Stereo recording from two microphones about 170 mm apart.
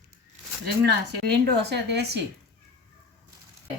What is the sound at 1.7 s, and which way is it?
Speech, 80° right.